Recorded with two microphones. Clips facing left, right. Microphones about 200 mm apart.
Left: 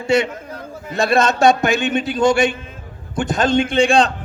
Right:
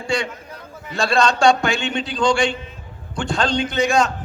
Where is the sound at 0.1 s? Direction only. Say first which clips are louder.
Left 7 dB; 25° left (ahead or behind).